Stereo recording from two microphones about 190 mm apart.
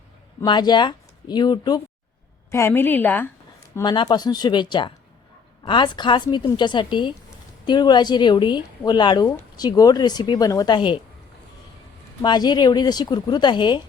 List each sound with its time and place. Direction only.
0.4 s a woman's voice: 25° left (ahead or behind)
3.8 s a woman's voice: 25° left (ahead or behind)
12.2 s a woman's voice: 20° left (ahead or behind)